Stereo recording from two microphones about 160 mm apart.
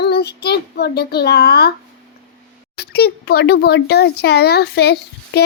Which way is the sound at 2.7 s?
85° left.